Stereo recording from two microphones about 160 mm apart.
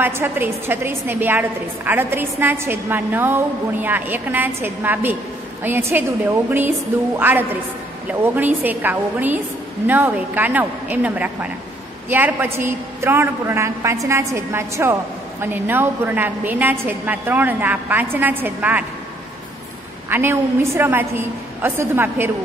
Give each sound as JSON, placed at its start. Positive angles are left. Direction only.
{"t": 0.0, "sound": "a woman's voice", "side_deg": -15}
{"t": 7.2, "sound": "a woman's voice", "side_deg": -10}
{"t": 20.1, "sound": "a woman's voice", "side_deg": -15}